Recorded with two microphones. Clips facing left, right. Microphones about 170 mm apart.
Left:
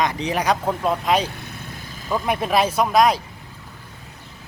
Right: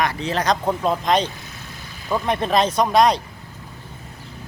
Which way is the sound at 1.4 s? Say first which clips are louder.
Left 3 dB; 55° left (ahead or behind).